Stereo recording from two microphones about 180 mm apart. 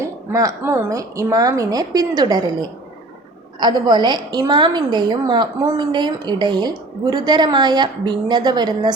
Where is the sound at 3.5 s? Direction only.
25° right (ahead or behind).